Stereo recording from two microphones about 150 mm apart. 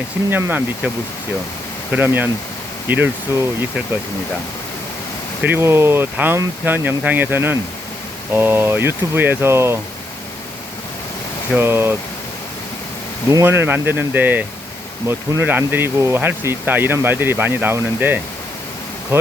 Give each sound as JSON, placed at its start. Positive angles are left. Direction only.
{"t": 0.3, "sound": "speech", "side_deg": -15}
{"t": 1.9, "sound": "speech", "side_deg": -10}
{"t": 5.4, "sound": "speech", "side_deg": -15}
{"t": 11.5, "sound": "speech", "side_deg": -15}
{"t": 13.3, "sound": "speech", "side_deg": -15}